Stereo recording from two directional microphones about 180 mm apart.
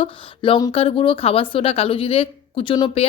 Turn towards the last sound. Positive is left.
turn(degrees=25)  # may be behind; listen again after turning